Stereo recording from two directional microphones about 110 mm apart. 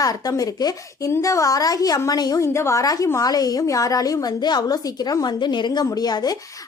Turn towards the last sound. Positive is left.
turn(degrees=40)  # may be behind; listen again after turning